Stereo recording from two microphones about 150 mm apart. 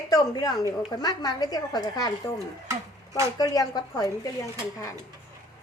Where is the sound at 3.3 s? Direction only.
25° left (ahead or behind).